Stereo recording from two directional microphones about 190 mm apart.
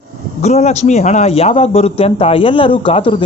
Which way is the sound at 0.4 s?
35° left (ahead or behind).